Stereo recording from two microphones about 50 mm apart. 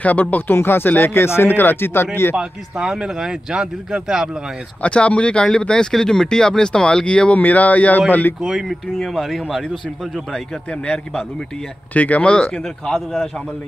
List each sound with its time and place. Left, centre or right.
0.0 s speech: left
0.6 s speech: left
2.3 s speech: centre
4.8 s speech: left
7.3 s speech: left
8.4 s speech: centre
11.9 s speech: left
12.6 s speech: centre